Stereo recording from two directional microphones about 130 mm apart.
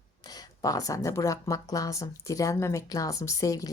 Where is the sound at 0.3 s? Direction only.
30° left (ahead or behind).